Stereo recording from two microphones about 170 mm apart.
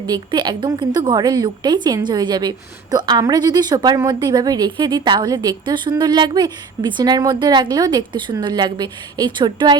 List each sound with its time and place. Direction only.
0.0 s a woman's voice: 25° right (ahead or behind)